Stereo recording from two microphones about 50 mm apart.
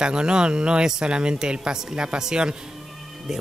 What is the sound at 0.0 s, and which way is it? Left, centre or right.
Speech, centre.